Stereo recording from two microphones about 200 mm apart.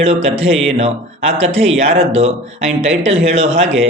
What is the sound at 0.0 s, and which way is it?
Speech, 30° right (ahead or behind).